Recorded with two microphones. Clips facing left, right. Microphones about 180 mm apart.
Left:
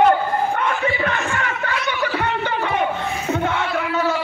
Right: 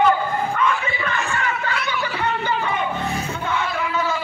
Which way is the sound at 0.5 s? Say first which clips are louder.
Left 2 dB; 60° left (ahead or behind).